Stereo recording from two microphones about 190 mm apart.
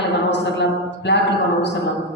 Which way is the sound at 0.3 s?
65° left (ahead or behind).